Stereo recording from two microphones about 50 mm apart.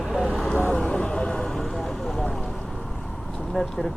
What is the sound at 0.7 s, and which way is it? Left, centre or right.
Vehicle, left.